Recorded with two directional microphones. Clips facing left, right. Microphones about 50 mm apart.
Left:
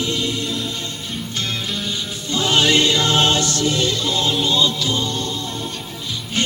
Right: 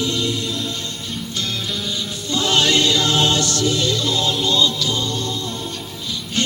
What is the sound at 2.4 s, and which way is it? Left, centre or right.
Music, left.